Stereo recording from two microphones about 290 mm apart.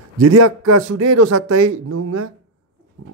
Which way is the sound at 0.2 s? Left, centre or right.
Right.